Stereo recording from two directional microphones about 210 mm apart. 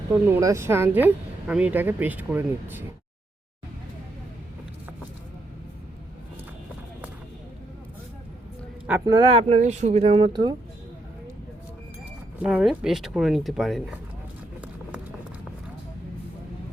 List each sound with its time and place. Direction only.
0.1 s speech: 15° right (ahead or behind)
8.9 s speech: 20° right (ahead or behind)
12.4 s speech: 5° right (ahead or behind)